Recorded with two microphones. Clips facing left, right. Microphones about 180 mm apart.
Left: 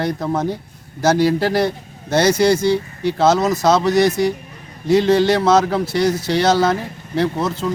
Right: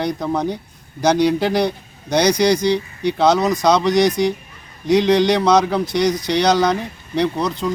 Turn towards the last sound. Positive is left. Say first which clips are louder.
# even
turn(degrees=5)  # may be behind; listen again after turning